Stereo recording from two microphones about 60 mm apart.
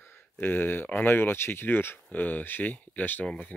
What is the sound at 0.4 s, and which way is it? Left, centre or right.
Speech, left.